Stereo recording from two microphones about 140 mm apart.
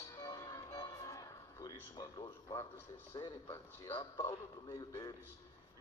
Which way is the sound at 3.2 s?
30° left (ahead or behind).